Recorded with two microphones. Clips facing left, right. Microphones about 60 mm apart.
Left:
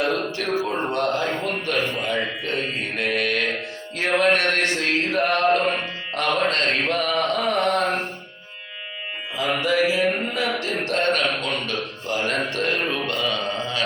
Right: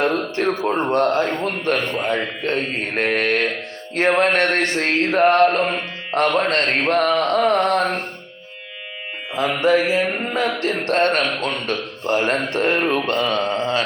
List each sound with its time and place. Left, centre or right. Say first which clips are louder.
0.0 s speech: right 4 dB; right
0.5 s speech: right 2 dB; right
6.7 s mantra: right 5 dB; right
9.3 s music: right 3 dB; right
9.6 s speech: right 3 dB; right